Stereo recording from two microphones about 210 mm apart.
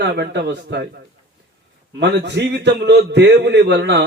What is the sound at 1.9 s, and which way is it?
A man's voice, 55° right (ahead or behind).